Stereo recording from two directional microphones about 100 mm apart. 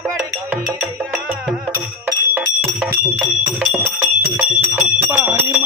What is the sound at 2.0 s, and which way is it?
Music, 20° right (ahead or behind).